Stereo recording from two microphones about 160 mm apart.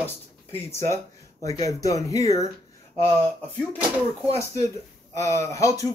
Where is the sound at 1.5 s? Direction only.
20° left (ahead or behind).